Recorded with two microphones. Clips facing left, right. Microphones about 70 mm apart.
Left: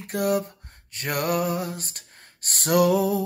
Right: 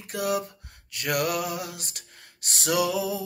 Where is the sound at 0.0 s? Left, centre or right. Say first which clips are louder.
Left 4 dB; left.